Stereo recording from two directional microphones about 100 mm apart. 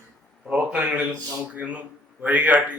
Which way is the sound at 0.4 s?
15° right (ahead or behind).